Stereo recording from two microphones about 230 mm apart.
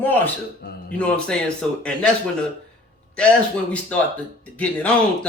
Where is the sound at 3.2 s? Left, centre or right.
Centre.